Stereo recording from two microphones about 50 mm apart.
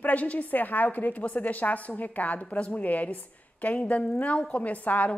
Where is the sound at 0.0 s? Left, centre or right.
Left.